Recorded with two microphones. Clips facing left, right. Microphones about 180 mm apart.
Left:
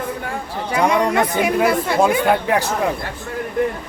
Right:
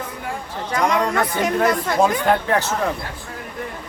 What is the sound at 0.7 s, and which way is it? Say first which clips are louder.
Speech: left 3 dB; 10° left (ahead or behind).